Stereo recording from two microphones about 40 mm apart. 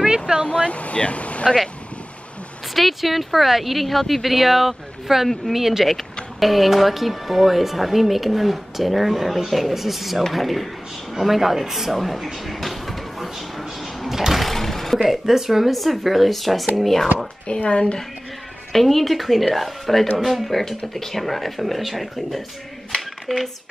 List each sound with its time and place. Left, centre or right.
0.0 s vehicle: right
0.5 s speech: left
2.7 s speech: centre
12.4 s a sound: centre
14.5 s speech: centre
17.5 s speech: left
18.7 s speech: centre